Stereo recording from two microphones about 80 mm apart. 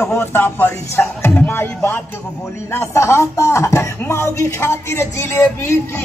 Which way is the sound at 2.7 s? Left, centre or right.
Left.